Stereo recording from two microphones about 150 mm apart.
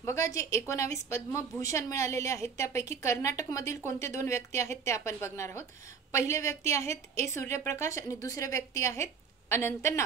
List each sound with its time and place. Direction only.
0.0 s a woman's voice: 20° left (ahead or behind)